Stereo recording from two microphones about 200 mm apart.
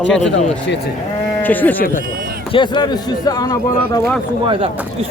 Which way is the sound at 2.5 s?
25° left (ahead or behind).